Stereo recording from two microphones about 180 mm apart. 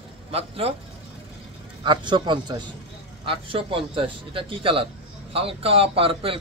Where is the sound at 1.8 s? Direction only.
25° right (ahead or behind).